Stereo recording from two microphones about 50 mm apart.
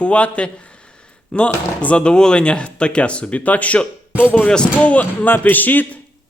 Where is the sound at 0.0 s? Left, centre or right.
Left.